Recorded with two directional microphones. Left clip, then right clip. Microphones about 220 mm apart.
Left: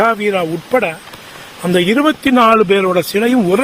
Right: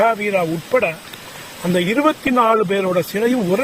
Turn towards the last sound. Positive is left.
turn(degrees=50)  # may be behind; listen again after turning